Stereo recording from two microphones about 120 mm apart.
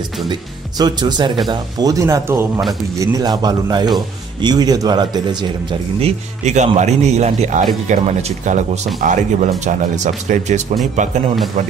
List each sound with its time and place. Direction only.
0.3 s speech: 35° right (ahead or behind)
5.9 s a man's voice: 65° right (ahead or behind)
7.9 s speech: 85° right